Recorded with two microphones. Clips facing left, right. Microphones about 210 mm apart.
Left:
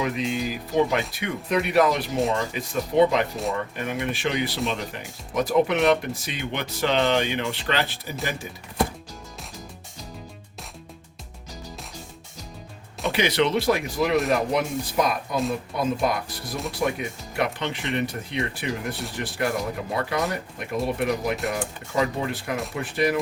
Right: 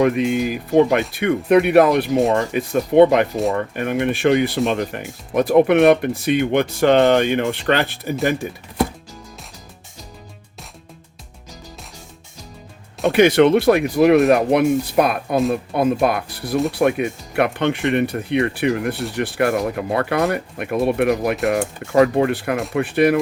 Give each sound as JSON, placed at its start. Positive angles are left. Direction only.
{"t": 0.0, "sound": "speech", "side_deg": -55}
{"t": 13.1, "sound": "speech", "side_deg": -50}